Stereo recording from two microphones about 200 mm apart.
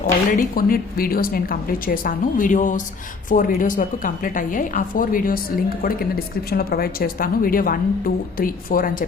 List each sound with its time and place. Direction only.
0.3 s a woman's voice: 45° left (ahead or behind)